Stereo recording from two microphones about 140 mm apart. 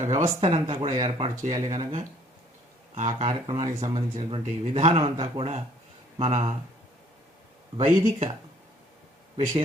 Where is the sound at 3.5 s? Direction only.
55° right (ahead or behind).